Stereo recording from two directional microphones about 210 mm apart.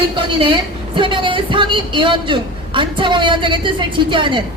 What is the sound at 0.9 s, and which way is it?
A woman's voice, 25° right (ahead or behind).